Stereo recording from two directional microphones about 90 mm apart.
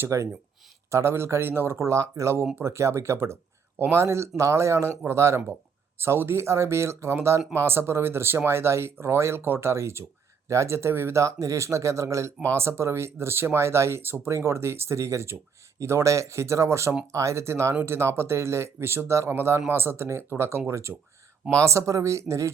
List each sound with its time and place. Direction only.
0.0 s speech: 35° right (ahead or behind)